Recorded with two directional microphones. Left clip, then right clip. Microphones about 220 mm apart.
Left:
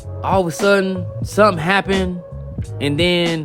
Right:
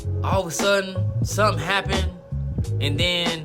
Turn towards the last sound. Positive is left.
turn(degrees=30)  # may be behind; listen again after turning